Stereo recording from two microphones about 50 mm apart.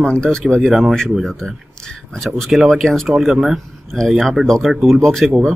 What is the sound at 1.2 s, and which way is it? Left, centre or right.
Speech, centre.